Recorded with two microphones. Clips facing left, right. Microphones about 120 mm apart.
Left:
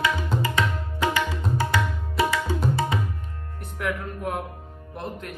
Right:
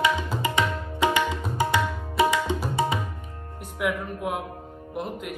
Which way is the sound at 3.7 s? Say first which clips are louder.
Right 2 dB; 10° right (ahead or behind).